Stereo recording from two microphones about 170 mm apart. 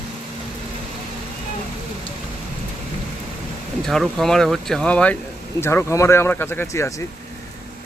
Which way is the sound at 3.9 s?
Centre (ahead or behind).